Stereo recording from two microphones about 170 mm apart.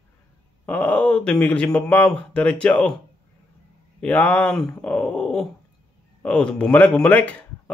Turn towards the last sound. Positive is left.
turn(degrees=10)  # may be behind; listen again after turning